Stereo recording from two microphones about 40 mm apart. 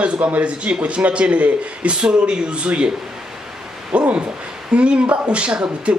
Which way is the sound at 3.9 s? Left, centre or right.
Right.